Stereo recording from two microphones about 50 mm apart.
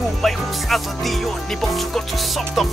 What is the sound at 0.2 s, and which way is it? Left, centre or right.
Speech, centre.